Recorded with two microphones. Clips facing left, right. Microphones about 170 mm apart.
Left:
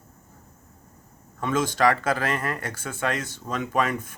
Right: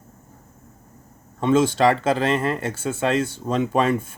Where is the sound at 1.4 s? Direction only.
25° right (ahead or behind).